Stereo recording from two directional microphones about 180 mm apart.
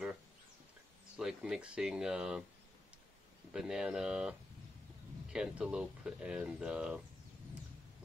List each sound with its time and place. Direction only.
1.1 s speech: 5° right (ahead or behind)
3.5 s speech: 5° right (ahead or behind)